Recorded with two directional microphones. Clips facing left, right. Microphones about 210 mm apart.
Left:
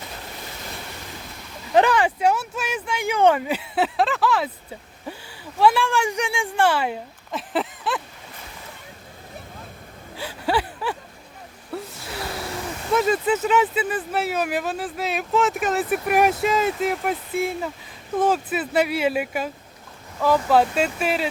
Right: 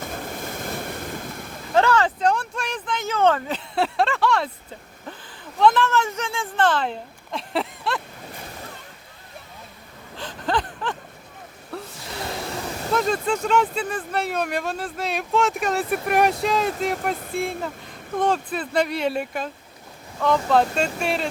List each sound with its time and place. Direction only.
0.0 s waves: 50° right (ahead or behind)
1.7 s speech: 15° left (ahead or behind)
5.5 s speech: 10° left (ahead or behind)
10.2 s a sound: 10° left (ahead or behind)
11.7 s gasp: 5° left (ahead or behind)
12.9 s speech: 5° left (ahead or behind)